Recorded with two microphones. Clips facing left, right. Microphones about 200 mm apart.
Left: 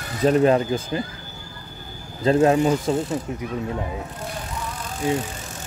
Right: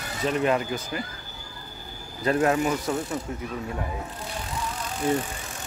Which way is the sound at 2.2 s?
25° left (ahead or behind).